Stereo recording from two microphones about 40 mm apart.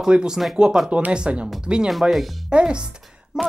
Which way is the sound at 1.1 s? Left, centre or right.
Right.